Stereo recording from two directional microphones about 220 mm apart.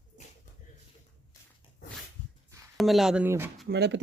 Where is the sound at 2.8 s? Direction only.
Centre (ahead or behind).